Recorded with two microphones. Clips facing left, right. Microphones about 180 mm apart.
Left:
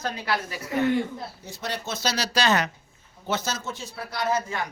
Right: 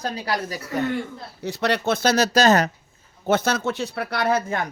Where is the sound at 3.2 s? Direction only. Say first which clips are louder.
Right 8 dB; 55° right (ahead or behind).